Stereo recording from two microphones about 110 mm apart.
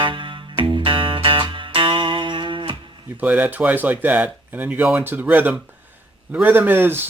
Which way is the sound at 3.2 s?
15° right (ahead or behind).